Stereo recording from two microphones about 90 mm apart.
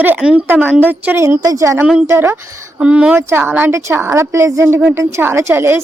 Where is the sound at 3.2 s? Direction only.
25° right (ahead or behind).